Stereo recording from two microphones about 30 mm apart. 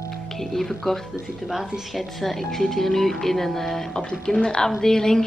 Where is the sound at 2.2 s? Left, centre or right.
Centre.